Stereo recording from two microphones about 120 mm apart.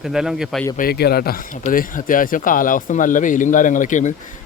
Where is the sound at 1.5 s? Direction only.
90° left.